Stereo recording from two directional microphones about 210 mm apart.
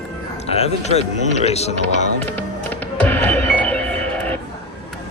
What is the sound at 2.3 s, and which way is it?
Music, 10° left (ahead or behind).